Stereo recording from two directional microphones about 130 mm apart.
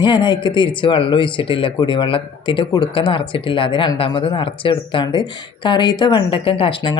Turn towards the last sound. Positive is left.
turn(degrees=45)  # may be behind; listen again after turning